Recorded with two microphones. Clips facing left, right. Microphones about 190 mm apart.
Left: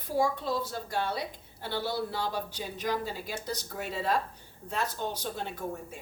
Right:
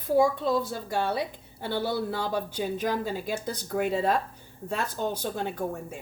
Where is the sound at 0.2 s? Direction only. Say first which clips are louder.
Right 4 dB; 55° right (ahead or behind).